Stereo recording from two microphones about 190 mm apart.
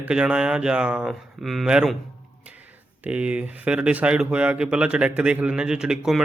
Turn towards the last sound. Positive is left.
turn(degrees=-5)  # may be behind; listen again after turning